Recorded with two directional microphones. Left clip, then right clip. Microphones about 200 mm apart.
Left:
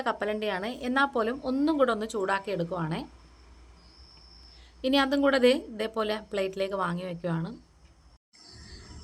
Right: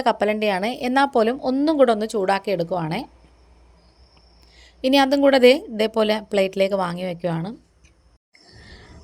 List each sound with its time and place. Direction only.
0.0 s a woman's voice: 30° right (ahead or behind)
4.5 s a woman's voice: 30° right (ahead or behind)